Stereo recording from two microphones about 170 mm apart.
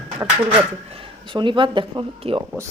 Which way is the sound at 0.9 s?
30° right (ahead or behind).